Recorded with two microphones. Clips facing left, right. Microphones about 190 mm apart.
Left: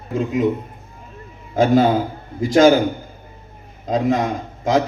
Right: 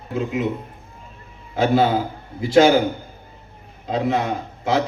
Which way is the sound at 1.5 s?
40° left (ahead or behind).